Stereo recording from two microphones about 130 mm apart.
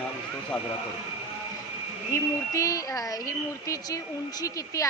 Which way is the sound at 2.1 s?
25° left (ahead or behind).